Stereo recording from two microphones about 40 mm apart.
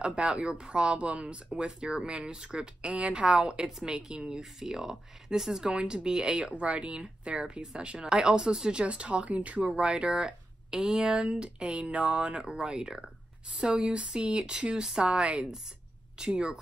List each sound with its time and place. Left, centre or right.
0.0 s speech: right
5.7 s speech: right
8.8 s a woman's voice: right
9.7 s speech: right
11.1 s speech: right